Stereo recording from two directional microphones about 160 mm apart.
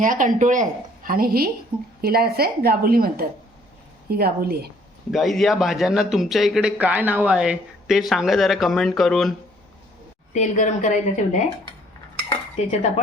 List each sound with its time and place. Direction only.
0.0 s a woman's voice: 55° right (ahead or behind); by 4.7 s 70° right (ahead or behind)
5.1 s a man's voice: centre (ahead or behind)
10.3 s a woman's voice: 45° left (ahead or behind)